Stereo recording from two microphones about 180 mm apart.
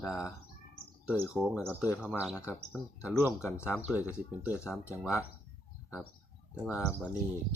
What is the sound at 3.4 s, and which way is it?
Speech, 15° left (ahead or behind).